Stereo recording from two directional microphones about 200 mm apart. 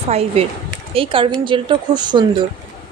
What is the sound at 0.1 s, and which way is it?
A woman's voice, 30° right (ahead or behind).